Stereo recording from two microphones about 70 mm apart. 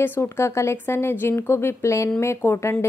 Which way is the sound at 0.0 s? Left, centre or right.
Left.